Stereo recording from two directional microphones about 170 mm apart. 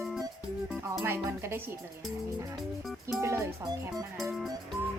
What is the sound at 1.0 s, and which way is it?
Speech, 15° right (ahead or behind).